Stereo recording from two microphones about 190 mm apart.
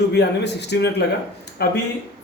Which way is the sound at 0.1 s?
60° left (ahead or behind).